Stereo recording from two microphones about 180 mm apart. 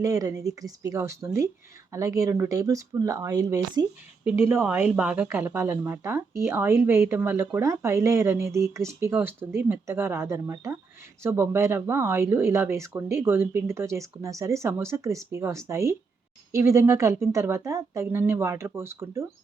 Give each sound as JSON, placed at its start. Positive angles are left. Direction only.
{"t": 0.0, "sound": "speech", "side_deg": -20}
{"t": 4.6, "sound": "speech", "side_deg": -5}